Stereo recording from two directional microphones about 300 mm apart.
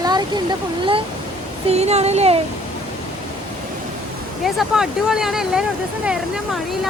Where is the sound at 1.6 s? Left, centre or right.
Right.